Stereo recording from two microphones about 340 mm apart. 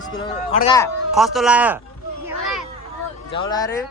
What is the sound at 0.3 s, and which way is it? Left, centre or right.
Speech, centre.